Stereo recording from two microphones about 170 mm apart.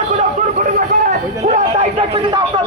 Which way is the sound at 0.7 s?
55° right (ahead or behind).